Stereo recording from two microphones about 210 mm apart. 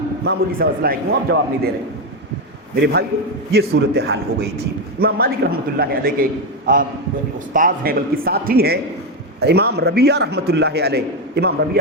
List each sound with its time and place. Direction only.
0.3 s a man's voice: 45° right (ahead or behind)
2.8 s a man's voice: 50° right (ahead or behind)